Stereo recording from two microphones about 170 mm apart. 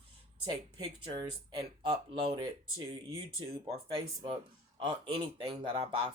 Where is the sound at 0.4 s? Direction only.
25° right (ahead or behind).